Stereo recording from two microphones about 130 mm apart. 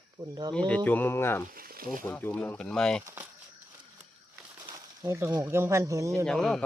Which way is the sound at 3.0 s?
15° right (ahead or behind).